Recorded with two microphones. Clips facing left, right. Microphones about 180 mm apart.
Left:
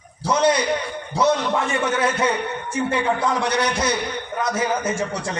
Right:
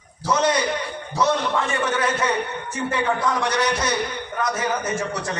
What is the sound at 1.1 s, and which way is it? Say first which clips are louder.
A man's voice: left 2 dB; 25° left (ahead or behind).